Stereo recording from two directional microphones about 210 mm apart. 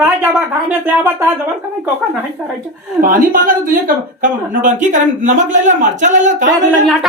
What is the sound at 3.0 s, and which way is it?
A man's voice, 40° right (ahead or behind).